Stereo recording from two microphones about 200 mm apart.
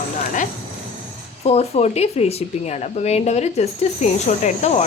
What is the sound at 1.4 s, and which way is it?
Speech, 30° left (ahead or behind).